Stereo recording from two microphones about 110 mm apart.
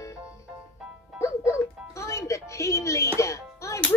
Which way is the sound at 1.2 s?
25° left (ahead or behind).